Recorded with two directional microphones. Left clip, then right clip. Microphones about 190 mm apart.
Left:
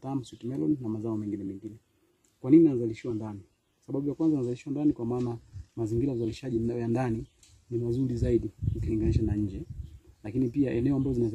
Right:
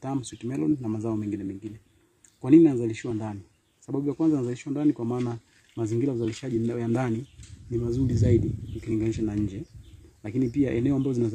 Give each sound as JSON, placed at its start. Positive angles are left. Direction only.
{"t": 0.0, "sound": "speech", "side_deg": -20}
{"t": 2.4, "sound": "speech", "side_deg": -25}